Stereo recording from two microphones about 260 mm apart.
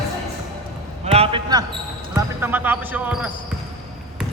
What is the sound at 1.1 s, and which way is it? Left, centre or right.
Basketball bounce, right.